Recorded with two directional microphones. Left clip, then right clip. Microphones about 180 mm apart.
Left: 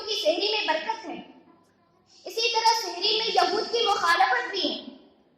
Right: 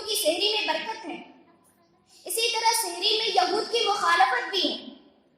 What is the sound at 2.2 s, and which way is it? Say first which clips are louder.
Child singing: even; 10° left (ahead or behind).